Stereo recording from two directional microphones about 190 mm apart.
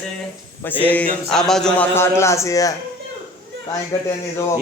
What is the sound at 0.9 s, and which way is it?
Speech, 5° left (ahead or behind).